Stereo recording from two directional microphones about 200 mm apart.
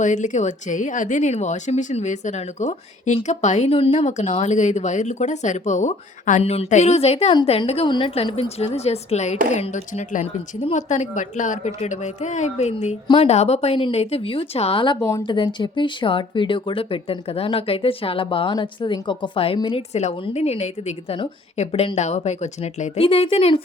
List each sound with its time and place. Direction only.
0.0 s speech: 35° left (ahead or behind)